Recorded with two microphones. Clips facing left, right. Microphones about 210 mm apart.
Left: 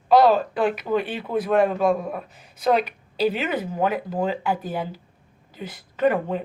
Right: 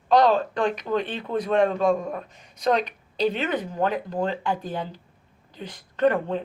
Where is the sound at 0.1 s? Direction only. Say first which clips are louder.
Left 2 dB; 5° left (ahead or behind).